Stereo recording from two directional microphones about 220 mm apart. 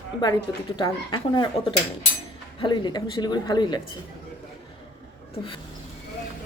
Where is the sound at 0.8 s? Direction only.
20° left (ahead or behind).